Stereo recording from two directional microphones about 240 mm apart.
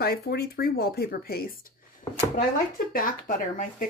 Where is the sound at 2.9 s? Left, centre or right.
Left.